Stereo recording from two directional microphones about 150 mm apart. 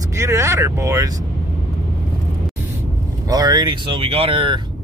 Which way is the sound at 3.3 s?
25° right (ahead or behind).